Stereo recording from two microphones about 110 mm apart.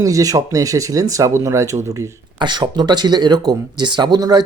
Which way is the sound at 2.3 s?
45° right (ahead or behind).